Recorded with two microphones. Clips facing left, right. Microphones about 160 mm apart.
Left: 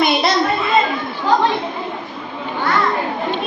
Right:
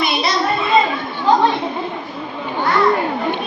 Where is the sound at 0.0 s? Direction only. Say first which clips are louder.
Left 3 dB; 50° left (ahead or behind).